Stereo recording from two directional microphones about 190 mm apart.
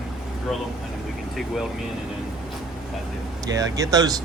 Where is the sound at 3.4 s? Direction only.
20° right (ahead or behind).